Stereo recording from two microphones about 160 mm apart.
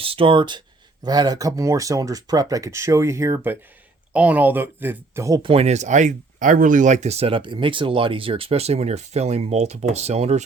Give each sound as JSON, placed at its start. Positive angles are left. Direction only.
{"t": 0.0, "sound": "speech", "side_deg": -35}
{"t": 5.4, "sound": "speech", "side_deg": -40}